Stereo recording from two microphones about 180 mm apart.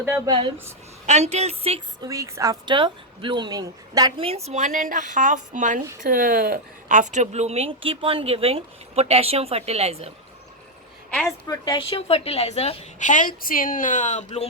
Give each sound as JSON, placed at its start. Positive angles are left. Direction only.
{"t": 1.0, "sound": "a woman's voice", "side_deg": -40}
{"t": 2.0, "sound": "a woman's voice", "side_deg": -20}
{"t": 4.3, "sound": "a woman's voice", "side_deg": -35}
{"t": 11.3, "sound": "a woman's voice", "side_deg": 20}